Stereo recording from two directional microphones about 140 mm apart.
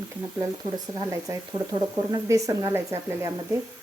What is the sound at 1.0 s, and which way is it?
Speech, 25° right (ahead or behind).